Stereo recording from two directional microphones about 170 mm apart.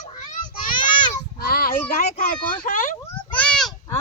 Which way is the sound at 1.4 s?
60° left (ahead or behind).